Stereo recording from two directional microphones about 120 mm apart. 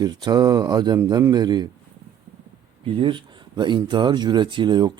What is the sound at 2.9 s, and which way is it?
Speech, 45° right (ahead or behind).